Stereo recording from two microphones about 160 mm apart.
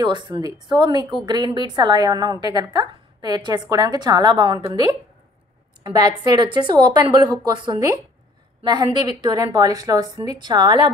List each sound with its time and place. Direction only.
0.0 s a woman's voice: 30° right (ahead or behind)